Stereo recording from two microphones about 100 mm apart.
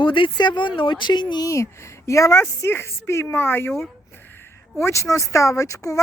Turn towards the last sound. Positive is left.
turn(degrees=35)  # may be behind; listen again after turning